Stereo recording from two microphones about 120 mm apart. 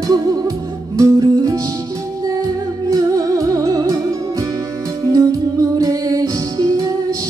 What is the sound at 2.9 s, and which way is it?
Music, 30° right (ahead or behind).